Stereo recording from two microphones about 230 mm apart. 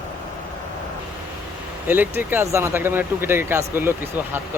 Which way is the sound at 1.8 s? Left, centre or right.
Centre.